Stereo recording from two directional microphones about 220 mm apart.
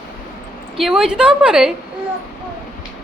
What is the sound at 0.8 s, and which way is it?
Speech, centre (ahead or behind).